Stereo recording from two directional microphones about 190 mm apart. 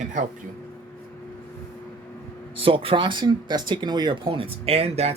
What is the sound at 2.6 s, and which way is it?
Speech, 30° right (ahead or behind).